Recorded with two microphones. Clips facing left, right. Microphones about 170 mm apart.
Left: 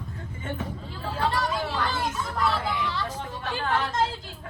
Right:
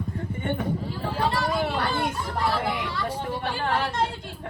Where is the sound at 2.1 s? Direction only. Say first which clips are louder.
Even; 30° right (ahead or behind).